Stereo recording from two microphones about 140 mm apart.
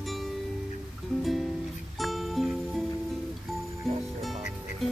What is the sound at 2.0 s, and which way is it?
Music, centre (ahead or behind).